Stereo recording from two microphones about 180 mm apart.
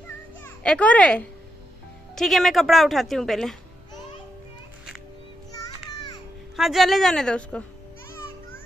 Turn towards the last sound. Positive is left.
turn(degrees=5)  # may be behind; listen again after turning